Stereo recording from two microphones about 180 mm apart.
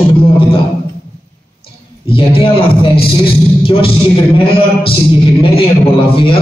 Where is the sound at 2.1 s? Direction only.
30° left (ahead or behind).